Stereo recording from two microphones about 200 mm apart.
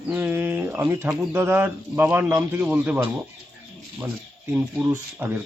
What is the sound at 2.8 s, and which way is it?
Speech, centre (ahead or behind).